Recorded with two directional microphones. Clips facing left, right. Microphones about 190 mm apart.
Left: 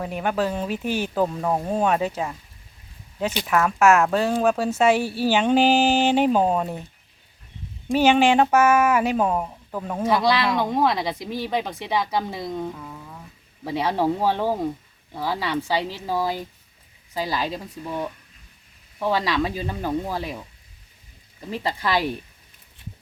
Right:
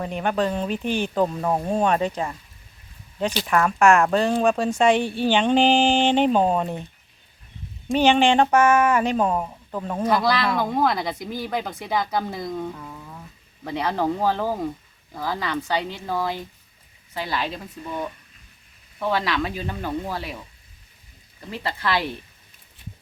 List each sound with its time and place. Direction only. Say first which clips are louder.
0.0 s speech: right 1 dB; 5° left (ahead or behind)
3.4 s speech: even; 5° left (ahead or behind)
7.9 s speech: even; 5° left (ahead or behind)
12.7 s a sound: even; centre (ahead or behind)
13.7 s speech: left 2 dB; 5° left (ahead or behind)
17.3 s speech: right 1 dB; 35° left (ahead or behind)
17.8 s speech: even; 5° left (ahead or behind)
21.6 s speech: left 1 dB; 15° left (ahead or behind)